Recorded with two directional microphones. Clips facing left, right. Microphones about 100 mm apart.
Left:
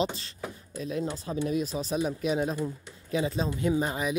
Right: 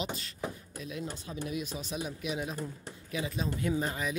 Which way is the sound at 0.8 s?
35° left (ahead or behind).